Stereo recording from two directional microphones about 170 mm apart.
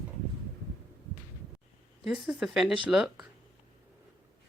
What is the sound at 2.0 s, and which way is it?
Speech, 5° right (ahead or behind).